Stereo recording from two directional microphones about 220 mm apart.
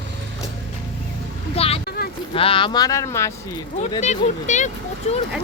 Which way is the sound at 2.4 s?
25° left (ahead or behind).